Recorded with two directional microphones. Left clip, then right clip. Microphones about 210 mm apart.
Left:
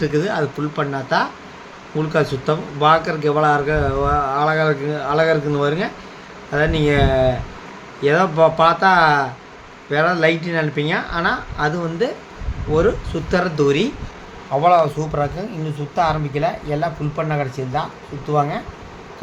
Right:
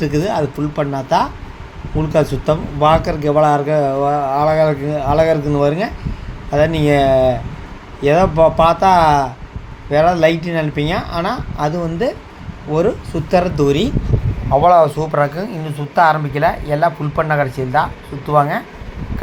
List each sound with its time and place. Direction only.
0.0 s speech: 10° right (ahead or behind)
13.3 s speech: 10° right (ahead or behind)